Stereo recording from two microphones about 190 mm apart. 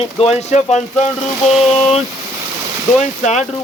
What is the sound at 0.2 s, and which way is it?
Speech, 35° left (ahead or behind).